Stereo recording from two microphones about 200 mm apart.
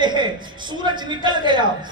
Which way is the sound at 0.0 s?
20° right (ahead or behind).